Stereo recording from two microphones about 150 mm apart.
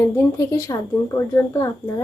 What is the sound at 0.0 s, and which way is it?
A woman's voice, 20° left (ahead or behind).